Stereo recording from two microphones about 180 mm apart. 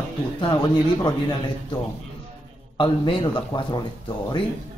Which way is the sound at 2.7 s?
25° left (ahead or behind).